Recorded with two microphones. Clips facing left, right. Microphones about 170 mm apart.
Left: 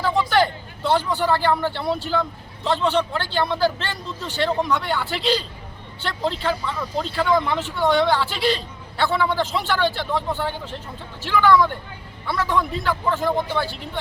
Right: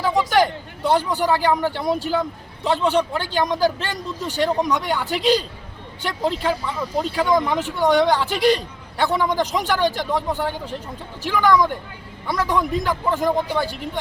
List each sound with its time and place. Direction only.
0.0 s speech: 10° right (ahead or behind)
8.3 s speech: 45° right (ahead or behind)
9.0 s speech: 15° right (ahead or behind)